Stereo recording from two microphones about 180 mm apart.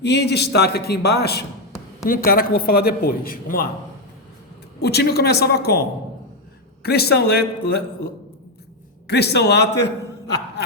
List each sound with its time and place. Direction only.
0.0 s a man's voice: 70° left (ahead or behind); by 3.7 s 55° left (ahead or behind)
4.8 s a man's voice: 65° left (ahead or behind)
6.8 s a man's voice: 60° left (ahead or behind)
9.0 s a man's voice: 65° left (ahead or behind)